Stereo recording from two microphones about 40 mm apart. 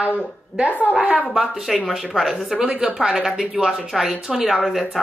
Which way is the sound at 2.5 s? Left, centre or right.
Right.